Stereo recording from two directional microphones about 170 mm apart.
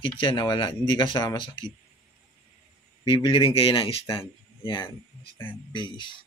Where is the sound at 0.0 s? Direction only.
30° left (ahead or behind).